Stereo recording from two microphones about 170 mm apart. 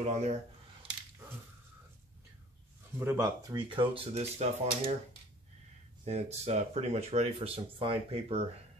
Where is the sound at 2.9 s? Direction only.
15° right (ahead or behind).